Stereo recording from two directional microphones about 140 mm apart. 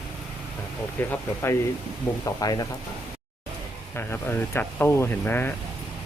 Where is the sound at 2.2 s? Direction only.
25° left (ahead or behind).